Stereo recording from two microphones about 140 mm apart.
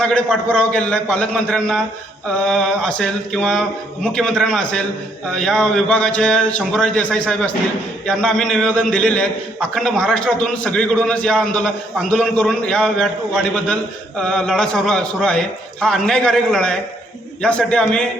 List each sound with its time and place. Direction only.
0.0 s a man's voice: 5° left (ahead or behind)
14.2 s a man's voice: 5° left (ahead or behind)